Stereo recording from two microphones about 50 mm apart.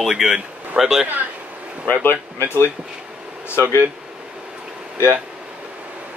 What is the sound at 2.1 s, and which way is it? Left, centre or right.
Speech, left.